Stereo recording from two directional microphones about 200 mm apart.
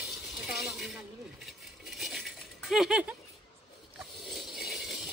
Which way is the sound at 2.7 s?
5° right (ahead or behind).